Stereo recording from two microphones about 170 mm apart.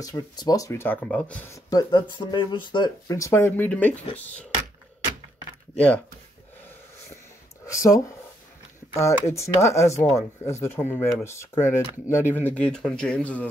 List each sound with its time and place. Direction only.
0.0 s speech: 20° left (ahead or behind)
7.6 s speech: 20° left (ahead or behind)
9.0 s speech: 15° left (ahead or behind)